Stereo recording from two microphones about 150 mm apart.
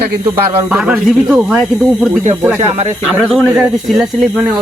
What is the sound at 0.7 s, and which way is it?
Speech, 5° right (ahead or behind).